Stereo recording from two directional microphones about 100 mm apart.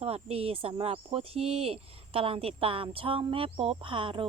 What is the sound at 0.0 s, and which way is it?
Speech, 80° right.